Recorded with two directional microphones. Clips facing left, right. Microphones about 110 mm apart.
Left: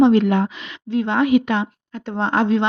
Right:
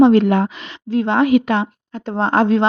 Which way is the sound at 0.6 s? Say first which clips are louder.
Right 3 dB; 35° right (ahead or behind).